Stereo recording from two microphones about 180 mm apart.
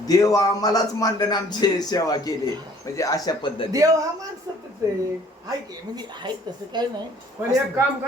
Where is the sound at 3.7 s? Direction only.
20° right (ahead or behind).